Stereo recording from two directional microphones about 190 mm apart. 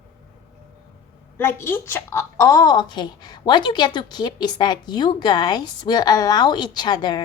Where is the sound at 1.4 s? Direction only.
10° left (ahead or behind).